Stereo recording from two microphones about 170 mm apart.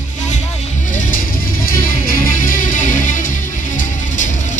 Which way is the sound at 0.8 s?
50° left (ahead or behind).